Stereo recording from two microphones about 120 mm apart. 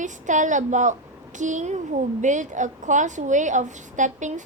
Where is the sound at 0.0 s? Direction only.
90° right.